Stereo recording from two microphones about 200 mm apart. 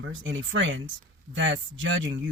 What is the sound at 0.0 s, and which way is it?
Speech, 65° right (ahead or behind).